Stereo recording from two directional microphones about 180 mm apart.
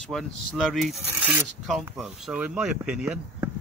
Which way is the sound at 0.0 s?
Centre (ahead or behind).